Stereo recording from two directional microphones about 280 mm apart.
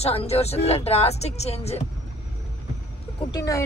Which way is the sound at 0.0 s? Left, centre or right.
Left.